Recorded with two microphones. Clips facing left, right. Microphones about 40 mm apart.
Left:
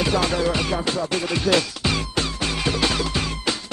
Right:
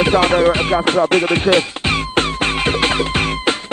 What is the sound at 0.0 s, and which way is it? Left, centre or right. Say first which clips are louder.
Music: right 8 dB; right.